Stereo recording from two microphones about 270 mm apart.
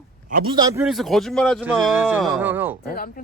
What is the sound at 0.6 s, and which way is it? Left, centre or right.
Speech, centre.